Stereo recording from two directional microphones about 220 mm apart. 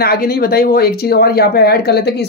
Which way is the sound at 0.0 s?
45° left (ahead or behind).